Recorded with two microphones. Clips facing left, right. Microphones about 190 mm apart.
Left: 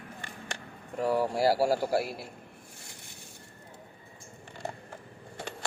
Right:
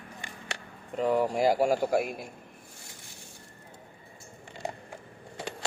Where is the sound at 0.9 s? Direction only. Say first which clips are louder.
Right 2 dB; 20° right (ahead or behind).